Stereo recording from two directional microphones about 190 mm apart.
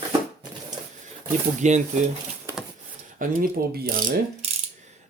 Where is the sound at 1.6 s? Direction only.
40° right (ahead or behind).